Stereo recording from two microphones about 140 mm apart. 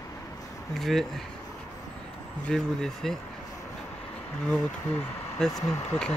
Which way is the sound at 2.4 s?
5° left (ahead or behind).